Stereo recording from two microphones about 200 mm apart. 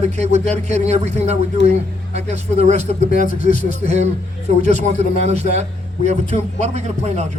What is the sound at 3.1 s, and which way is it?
Speech, 45° left (ahead or behind).